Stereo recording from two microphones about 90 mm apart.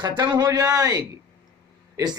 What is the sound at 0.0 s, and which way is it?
A man's voice, 55° right (ahead or behind).